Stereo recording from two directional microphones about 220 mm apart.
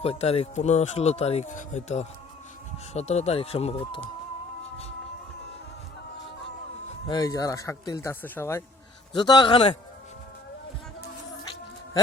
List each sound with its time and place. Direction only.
0.0 s speech: 30° left (ahead or behind)
7.1 s speech: 15° left (ahead or behind)